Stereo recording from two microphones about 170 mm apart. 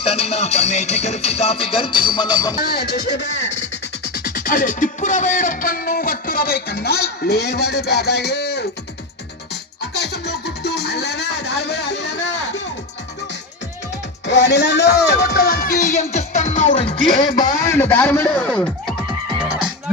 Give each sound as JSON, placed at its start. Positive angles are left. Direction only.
{"t": 0.0, "sound": "music", "side_deg": 35}
{"t": 2.6, "sound": "speech", "side_deg": 65}
{"t": 10.0, "sound": "music", "side_deg": 80}
{"t": 14.3, "sound": "music", "side_deg": 90}
{"t": 15.0, "sound": "speech", "side_deg": 70}
{"t": 16.1, "sound": "music", "side_deg": 40}
{"t": 16.9, "sound": "a man's voice", "side_deg": 25}